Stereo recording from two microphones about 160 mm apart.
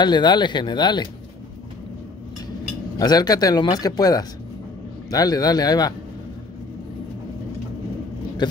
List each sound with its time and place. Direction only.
0.0 s speech: 25° left (ahead or behind)
3.0 s speech: 25° left (ahead or behind)
8.4 s speech: 30° left (ahead or behind)